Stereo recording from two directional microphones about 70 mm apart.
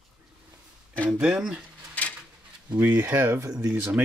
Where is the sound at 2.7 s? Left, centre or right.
Right.